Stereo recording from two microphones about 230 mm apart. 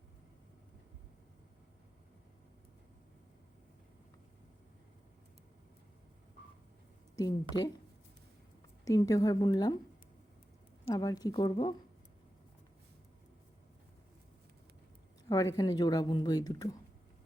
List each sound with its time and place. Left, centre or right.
7.2 s a woman's voice: centre
8.8 s a woman's voice: centre
10.8 s a woman's voice: centre
15.3 s a woman's voice: centre